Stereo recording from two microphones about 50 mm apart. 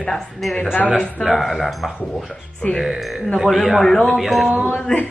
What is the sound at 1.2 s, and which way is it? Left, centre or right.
Speech, centre.